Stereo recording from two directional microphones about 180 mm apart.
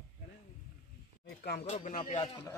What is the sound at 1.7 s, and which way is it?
Speech, 40° left (ahead or behind).